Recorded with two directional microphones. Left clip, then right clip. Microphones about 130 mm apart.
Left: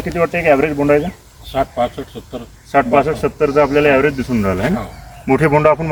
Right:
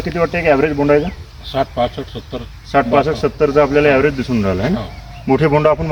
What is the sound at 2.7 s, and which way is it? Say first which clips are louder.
Speech: even; 10° left (ahead or behind).